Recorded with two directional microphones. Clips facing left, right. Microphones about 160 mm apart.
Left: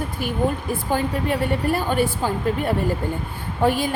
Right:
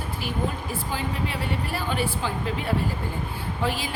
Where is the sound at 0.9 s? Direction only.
50° left (ahead or behind).